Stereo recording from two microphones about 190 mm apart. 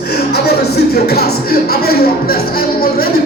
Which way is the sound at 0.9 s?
55° left (ahead or behind).